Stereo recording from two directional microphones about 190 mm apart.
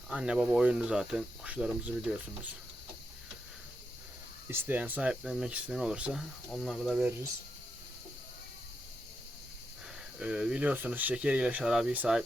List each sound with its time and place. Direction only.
0.1 s speech: 5° right (ahead or behind)
4.4 s speech: 10° right (ahead or behind)
10.2 s speech: 5° right (ahead or behind)